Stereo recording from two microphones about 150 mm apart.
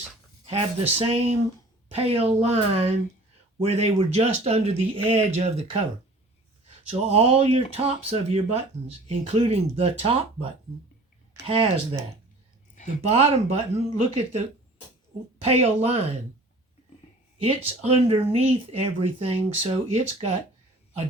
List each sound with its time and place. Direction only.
0.4 s speech: 40° right (ahead or behind)
6.9 s speech: 40° right (ahead or behind)
13.1 s speech: 45° right (ahead or behind)
15.4 s speech: 45° right (ahead or behind)
17.4 s speech: 40° right (ahead or behind)